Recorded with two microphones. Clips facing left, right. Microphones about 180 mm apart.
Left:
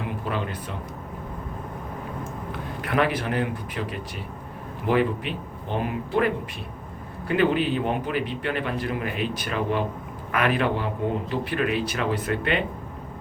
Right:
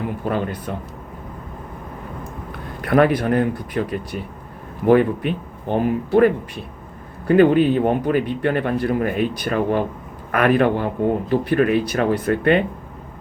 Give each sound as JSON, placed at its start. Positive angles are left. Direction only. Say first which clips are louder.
{"t": 0.3, "sound": "a man's voice", "louder": "right 8 dB", "side_deg": -45}
{"t": 2.9, "sound": "a man's voice", "louder": "right 8 dB", "side_deg": -50}
{"t": 4.9, "sound": "a man's voice", "louder": "right 8 dB", "side_deg": -50}
{"t": 7.3, "sound": "a man's voice", "louder": "right 8 dB", "side_deg": -45}